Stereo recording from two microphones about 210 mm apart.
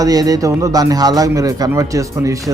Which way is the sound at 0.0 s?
15° right (ahead or behind).